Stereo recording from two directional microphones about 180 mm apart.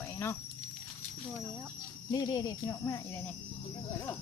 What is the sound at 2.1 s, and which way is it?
Speech, 20° left (ahead or behind).